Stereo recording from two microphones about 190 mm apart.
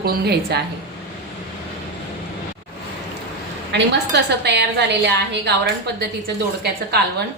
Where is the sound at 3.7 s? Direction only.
65° right (ahead or behind).